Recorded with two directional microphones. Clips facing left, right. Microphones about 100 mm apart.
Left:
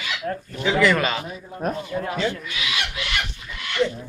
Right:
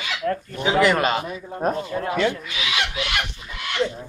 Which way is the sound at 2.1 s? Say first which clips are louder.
Right 5 dB; 60° right (ahead or behind).